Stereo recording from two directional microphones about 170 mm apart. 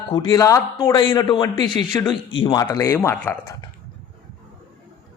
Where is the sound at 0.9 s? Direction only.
30° left (ahead or behind); by 3.5 s 10° left (ahead or behind).